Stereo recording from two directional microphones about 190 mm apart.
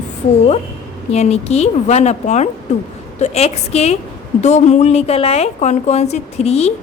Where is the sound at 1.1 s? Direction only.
35° left (ahead or behind).